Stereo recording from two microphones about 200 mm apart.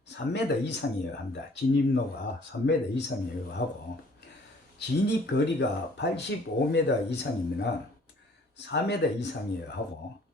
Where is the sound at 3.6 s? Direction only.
50° left (ahead or behind).